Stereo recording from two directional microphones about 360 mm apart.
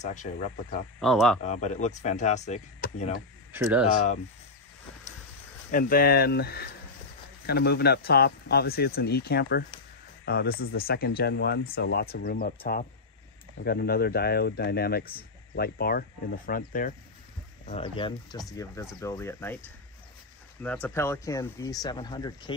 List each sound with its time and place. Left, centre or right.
0.0 s speech: centre
0.9 s speech: centre
1.4 s speech: centre
3.5 s speech: centre
5.7 s speech: left; by 19.6 s centre
20.6 s speech: centre